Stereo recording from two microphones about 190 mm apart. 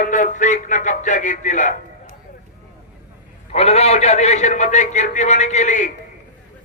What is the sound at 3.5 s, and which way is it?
A man's voice, 30° left (ahead or behind).